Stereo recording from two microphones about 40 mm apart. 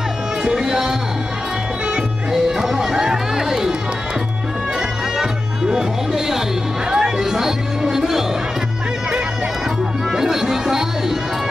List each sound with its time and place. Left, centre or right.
0.4 s speech: centre
2.3 s music: centre
4.7 s music: centre
10.1 s music: centre